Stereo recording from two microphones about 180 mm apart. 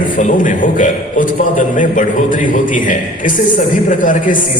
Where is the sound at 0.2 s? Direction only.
45° left (ahead or behind).